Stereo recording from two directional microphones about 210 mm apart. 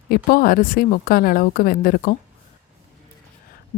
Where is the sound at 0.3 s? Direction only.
45° left (ahead or behind).